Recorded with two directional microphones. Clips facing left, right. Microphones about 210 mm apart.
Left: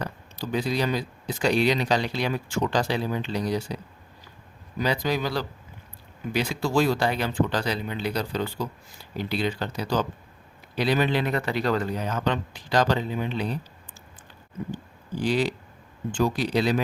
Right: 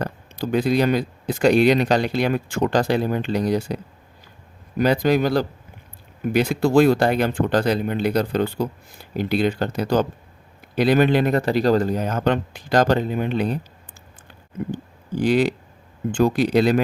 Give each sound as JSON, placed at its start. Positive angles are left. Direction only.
{"t": 0.0, "sound": "speech", "side_deg": -55}
{"t": 4.8, "sound": "speech", "side_deg": -55}
{"t": 14.7, "sound": "speech", "side_deg": -55}